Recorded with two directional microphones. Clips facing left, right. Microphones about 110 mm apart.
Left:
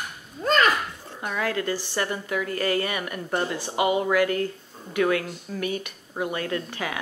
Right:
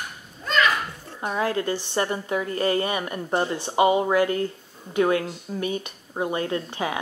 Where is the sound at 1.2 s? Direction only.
30° right (ahead or behind).